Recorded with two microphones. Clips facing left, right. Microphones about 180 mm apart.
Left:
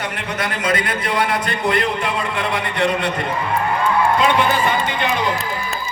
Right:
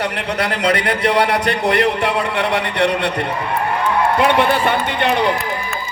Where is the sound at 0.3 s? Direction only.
70° right (ahead or behind).